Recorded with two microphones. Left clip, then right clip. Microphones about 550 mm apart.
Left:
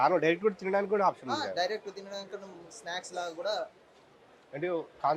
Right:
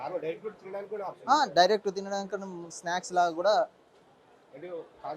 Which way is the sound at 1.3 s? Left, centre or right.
Right.